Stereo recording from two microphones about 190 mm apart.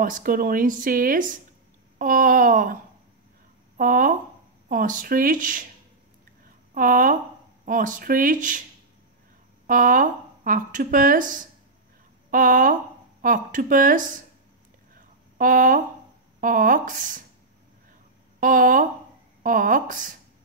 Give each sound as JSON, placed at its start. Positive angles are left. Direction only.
{"t": 0.0, "sound": "speech", "side_deg": -45}
{"t": 6.7, "sound": "speech", "side_deg": -45}
{"t": 9.7, "sound": "speech", "side_deg": -45}
{"t": 15.3, "sound": "speech", "side_deg": -45}
{"t": 18.4, "sound": "speech", "side_deg": -45}